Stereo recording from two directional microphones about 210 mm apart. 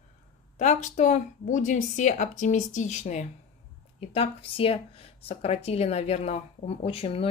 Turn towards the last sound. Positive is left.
turn(degrees=25)  # may be behind; listen again after turning